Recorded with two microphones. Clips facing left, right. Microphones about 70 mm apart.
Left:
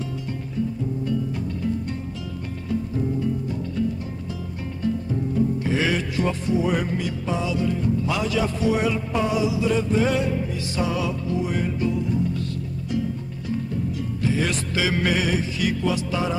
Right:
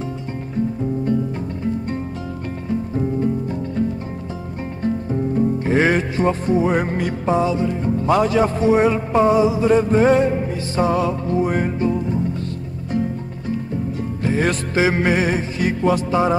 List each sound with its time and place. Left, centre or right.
2.7 s music: right
4.8 s music: right
8.0 s music: right
14.2 s music: right